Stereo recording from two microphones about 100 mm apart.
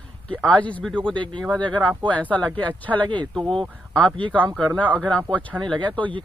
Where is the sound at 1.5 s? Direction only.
10° left (ahead or behind).